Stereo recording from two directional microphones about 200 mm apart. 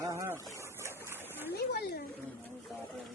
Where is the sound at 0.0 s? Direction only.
15° right (ahead or behind).